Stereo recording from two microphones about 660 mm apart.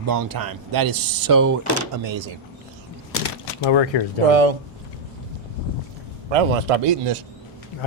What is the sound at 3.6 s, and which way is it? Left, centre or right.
Speech, left.